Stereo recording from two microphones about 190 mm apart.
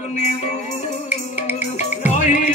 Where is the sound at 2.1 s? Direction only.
40° left (ahead or behind).